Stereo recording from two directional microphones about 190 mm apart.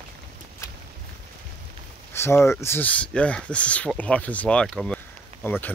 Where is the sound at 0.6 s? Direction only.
15° left (ahead or behind).